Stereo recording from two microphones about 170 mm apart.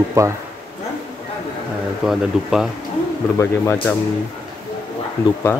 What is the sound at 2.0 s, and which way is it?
Speech, 5° right (ahead or behind).